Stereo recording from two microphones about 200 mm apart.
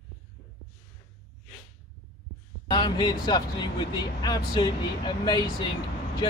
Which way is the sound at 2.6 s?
20° left (ahead or behind).